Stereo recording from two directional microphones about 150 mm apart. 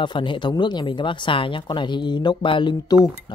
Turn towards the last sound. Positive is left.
turn(degrees=30)  # may be behind; listen again after turning